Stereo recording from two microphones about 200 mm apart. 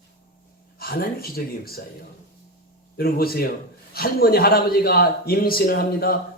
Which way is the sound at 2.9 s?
50° left (ahead or behind).